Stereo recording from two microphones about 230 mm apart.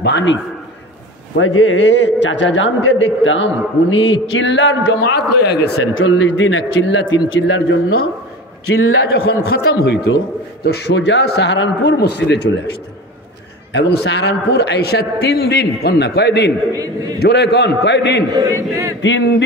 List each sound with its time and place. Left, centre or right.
0.0 s a man's voice: left
9.1 s a man's voice: left
13.7 s a man's voice: left
16.7 s a man's voice: centre
17.2 s a man's voice: left
18.3 s a man's voice: centre
19.0 s a man's voice: left